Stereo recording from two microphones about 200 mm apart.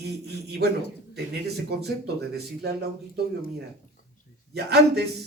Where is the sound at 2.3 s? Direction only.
55° right (ahead or behind).